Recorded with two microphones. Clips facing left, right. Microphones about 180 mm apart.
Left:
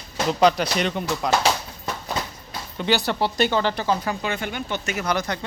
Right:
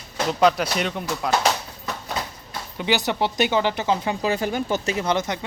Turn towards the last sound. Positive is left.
turn(degrees=-20)  # may be behind; listen again after turning